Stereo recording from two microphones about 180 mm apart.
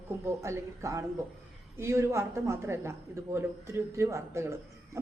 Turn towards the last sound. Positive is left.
turn(degrees=-15)  # may be behind; listen again after turning